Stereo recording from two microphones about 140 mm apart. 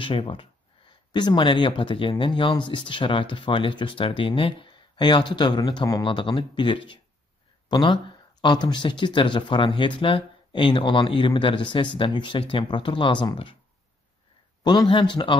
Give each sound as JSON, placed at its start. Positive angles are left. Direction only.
{"t": 0.0, "sound": "speech", "side_deg": 40}
{"t": 14.6, "sound": "speech", "side_deg": 30}